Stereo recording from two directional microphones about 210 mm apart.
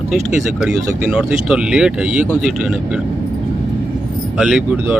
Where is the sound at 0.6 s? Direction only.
5° right (ahead or behind).